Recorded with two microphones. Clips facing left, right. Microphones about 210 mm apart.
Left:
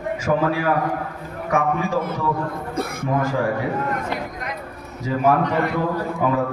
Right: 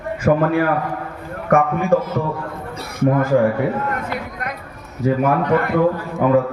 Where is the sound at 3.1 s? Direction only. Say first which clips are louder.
Right 7 dB; 55° right (ahead or behind).